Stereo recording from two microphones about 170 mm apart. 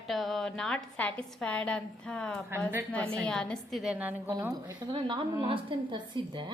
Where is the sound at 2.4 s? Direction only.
15° right (ahead or behind).